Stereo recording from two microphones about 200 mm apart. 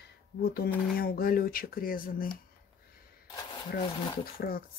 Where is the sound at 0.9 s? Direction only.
50° left (ahead or behind).